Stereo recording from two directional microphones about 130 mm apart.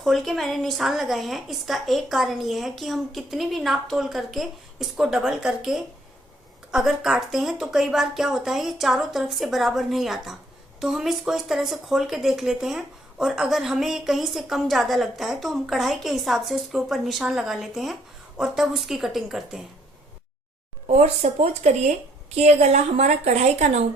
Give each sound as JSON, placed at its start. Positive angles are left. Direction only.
{"t": 0.0, "sound": "speech", "side_deg": 0}
{"t": 20.8, "sound": "a woman's voice", "side_deg": -55}